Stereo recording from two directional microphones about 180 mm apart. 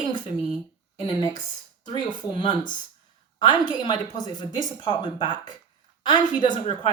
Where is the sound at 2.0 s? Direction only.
25° left (ahead or behind).